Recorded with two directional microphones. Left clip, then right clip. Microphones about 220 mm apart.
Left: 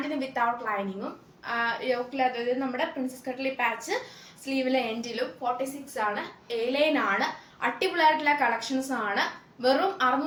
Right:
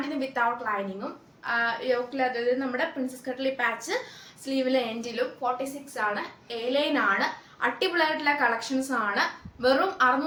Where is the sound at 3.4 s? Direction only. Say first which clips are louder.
Right 1 dB; 15° right (ahead or behind).